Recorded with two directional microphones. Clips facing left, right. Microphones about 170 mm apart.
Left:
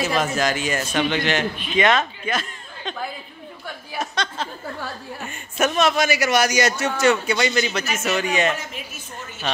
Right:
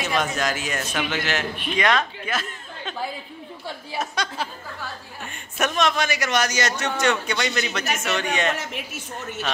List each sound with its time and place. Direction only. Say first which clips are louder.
0.0 s a man's voice: left 3 dB; centre (ahead or behind)
4.0 s a man's voice: left 1 dB; 5° right (ahead or behind)
8.5 s a woman's voice: right 2 dB; 75° right (ahead or behind)